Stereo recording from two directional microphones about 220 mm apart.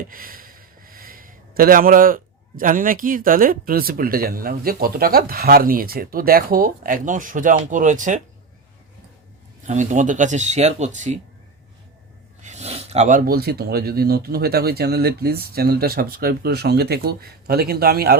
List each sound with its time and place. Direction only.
0.0 s speech: 40° right (ahead or behind)
9.6 s speech: 35° right (ahead or behind)
12.4 s speech: 30° right (ahead or behind)